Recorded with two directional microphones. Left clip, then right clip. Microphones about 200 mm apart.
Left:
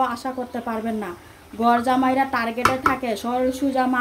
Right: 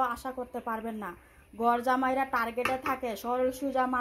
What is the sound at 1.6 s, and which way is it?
A woman's voice, 15° right (ahead or behind).